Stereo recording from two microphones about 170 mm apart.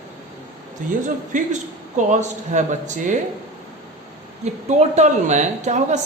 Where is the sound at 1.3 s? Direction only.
50° right (ahead or behind).